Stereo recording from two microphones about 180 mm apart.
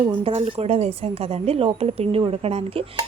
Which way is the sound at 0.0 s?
30° right (ahead or behind).